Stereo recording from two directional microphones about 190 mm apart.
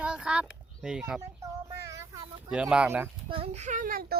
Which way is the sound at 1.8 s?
15° right (ahead or behind).